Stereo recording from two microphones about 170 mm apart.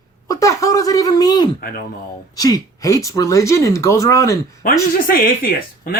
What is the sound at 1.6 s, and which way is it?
Speech, 60° left (ahead or behind).